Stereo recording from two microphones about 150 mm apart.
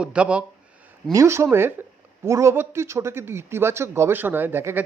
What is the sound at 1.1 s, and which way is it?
A man's voice, 20° right (ahead or behind).